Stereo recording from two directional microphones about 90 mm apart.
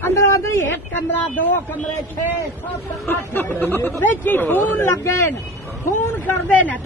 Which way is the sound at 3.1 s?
25° left (ahead or behind).